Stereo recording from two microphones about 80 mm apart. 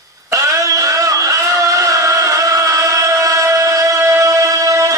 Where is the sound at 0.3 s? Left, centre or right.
Right.